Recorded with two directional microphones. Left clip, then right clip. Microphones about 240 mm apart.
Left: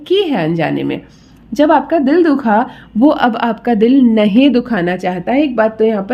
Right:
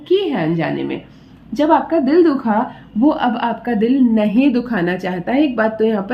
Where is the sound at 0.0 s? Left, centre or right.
Left.